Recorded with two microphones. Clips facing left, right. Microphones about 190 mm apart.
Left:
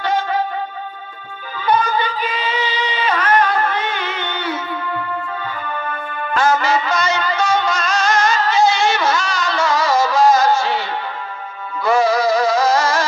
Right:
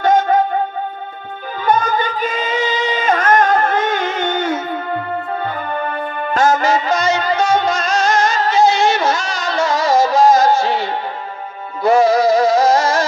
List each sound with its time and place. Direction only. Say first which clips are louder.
0.0 s music: right 6 dB; 45° right (ahead or behind)
1.6 s music: right 1 dB; 45° right (ahead or behind)
11.8 s music: right 4 dB; 50° right (ahead or behind)